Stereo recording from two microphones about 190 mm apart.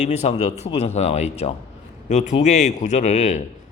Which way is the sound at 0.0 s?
35° left (ahead or behind).